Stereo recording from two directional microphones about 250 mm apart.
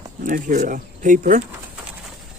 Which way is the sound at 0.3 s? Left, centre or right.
Right.